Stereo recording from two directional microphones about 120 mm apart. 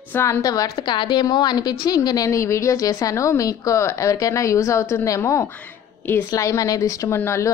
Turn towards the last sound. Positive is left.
turn(degrees=20)  # may be behind; listen again after turning